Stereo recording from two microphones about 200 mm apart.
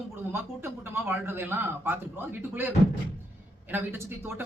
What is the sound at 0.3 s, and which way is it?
Speech, 10° right (ahead or behind).